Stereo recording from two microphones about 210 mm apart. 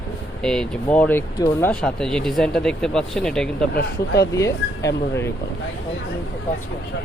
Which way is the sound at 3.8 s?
50° left (ahead or behind).